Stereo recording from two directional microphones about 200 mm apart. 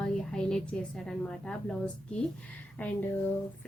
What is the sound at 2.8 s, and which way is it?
Speech, 10° left (ahead or behind).